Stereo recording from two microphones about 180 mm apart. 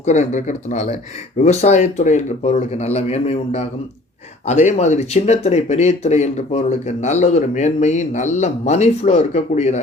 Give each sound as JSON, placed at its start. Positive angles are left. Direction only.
{"t": 0.0, "sound": "speech", "side_deg": 40}